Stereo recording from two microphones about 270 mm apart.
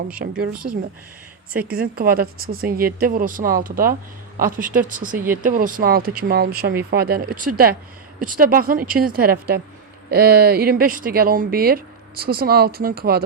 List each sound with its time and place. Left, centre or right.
0.2 s speech: right
0.5 s speech: right
1.5 s speech: right